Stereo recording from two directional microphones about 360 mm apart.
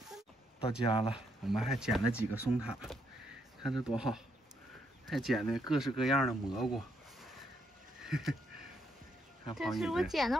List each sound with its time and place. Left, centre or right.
0.6 s speech: centre
1.1 s speech: centre
8.0 s a sound: centre
9.6 s speech: centre